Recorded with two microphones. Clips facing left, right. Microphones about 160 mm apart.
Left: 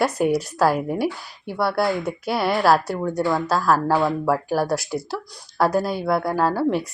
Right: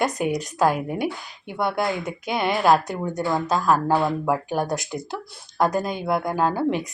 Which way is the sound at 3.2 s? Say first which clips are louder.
Left 1 dB; 15° right (ahead or behind).